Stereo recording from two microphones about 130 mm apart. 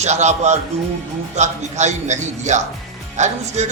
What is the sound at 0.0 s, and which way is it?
A man's voice, 60° right (ahead or behind).